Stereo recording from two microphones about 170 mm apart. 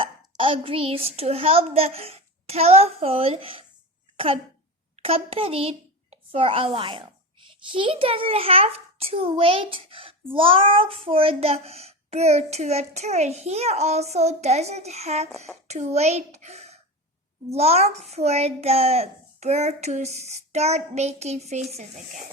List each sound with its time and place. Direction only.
0.0 s a child's voice: 30° right (ahead or behind)
4.9 s a child's voice: 35° right (ahead or behind)